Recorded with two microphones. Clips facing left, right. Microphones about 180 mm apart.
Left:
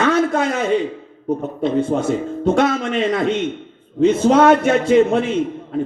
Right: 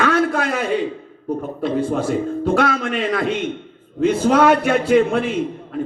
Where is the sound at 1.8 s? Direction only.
25° left (ahead or behind).